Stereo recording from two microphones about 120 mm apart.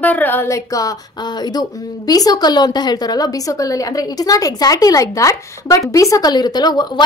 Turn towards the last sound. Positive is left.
turn(degrees=35)  # may be behind; listen again after turning